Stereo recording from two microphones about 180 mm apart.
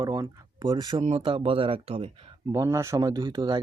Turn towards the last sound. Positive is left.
turn(degrees=-25)  # may be behind; listen again after turning